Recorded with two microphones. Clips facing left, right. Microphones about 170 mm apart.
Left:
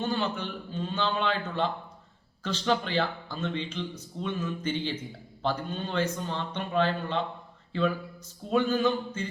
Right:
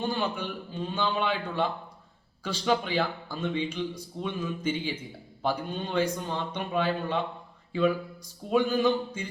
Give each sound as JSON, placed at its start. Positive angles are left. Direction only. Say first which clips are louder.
{"t": 0.0, "sound": "a man's voice", "louder": "even", "side_deg": -10}
{"t": 7.7, "sound": "a sound", "louder": "right 3 dB", "side_deg": -10}
{"t": 8.4, "sound": "a man's voice", "louder": "right 1 dB", "side_deg": -10}